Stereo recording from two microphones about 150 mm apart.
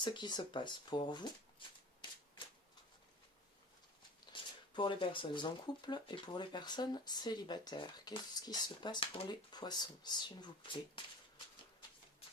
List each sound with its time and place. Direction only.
0.0 s speech: 30° left (ahead or behind)
4.3 s speech: 30° left (ahead or behind)